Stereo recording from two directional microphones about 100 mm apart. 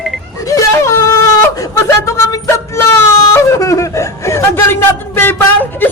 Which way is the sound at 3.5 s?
35° left (ahead or behind).